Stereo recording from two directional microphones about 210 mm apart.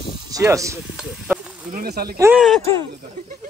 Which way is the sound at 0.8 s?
Centre (ahead or behind).